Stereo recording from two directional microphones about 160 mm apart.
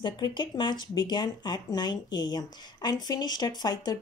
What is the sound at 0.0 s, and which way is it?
Speech, 30° left (ahead or behind).